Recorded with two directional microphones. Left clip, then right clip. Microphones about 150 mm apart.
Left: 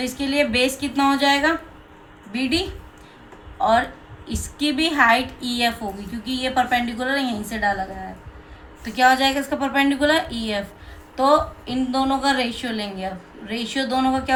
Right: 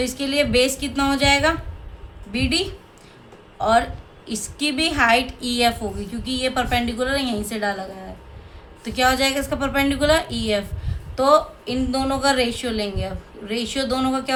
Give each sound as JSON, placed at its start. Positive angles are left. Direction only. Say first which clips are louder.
{"t": 0.0, "sound": "a woman's voice", "louder": "even", "side_deg": -45}
{"t": 8.8, "sound": "a woman's voice", "louder": "left 2 dB", "side_deg": -45}